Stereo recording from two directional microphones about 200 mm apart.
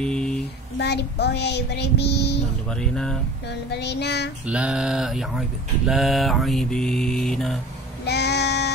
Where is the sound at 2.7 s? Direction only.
5° left (ahead or behind).